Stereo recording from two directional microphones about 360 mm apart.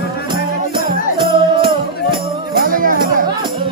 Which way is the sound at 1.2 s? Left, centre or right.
Centre.